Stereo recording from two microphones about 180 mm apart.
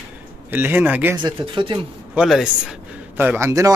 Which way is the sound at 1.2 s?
25° right (ahead or behind).